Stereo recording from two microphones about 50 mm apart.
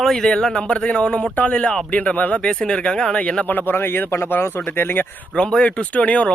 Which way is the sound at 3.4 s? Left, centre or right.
Left.